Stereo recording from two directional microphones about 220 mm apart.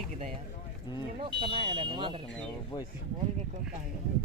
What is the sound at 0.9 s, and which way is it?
Speech, 20° left (ahead or behind).